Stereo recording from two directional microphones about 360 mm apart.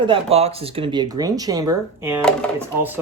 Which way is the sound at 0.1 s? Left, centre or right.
Centre.